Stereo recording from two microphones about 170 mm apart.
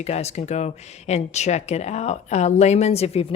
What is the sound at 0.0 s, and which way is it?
Speech, 40° left (ahead or behind).